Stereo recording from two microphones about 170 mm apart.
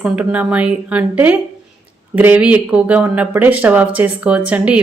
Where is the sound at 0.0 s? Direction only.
10° right (ahead or behind).